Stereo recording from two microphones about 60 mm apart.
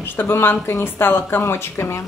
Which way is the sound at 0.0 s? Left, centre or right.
Left.